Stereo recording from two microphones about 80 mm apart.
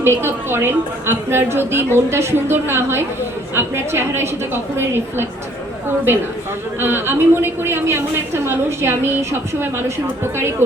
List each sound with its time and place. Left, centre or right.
0.0 s a woman's voice: right
6.7 s a woman's voice: right